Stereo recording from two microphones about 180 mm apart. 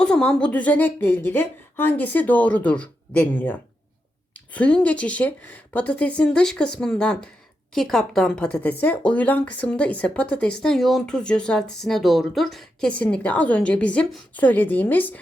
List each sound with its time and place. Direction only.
0.0 s speech: 5° left (ahead or behind)